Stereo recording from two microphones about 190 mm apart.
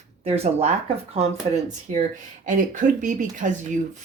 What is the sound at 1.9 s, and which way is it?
Speech, 40° right (ahead or behind).